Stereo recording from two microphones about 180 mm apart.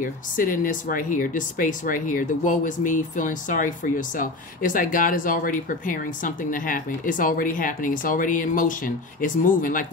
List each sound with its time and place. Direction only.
0.0 s speech: 50° left (ahead or behind)